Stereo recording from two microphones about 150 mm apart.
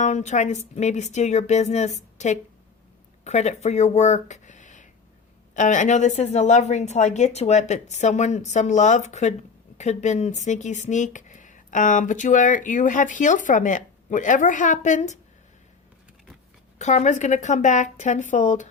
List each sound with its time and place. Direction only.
0.0 s a woman's voice: 50° left (ahead or behind)
16.7 s a woman's voice: 50° left (ahead or behind)